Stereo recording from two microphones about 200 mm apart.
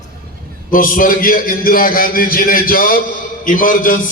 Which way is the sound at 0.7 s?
45° left (ahead or behind).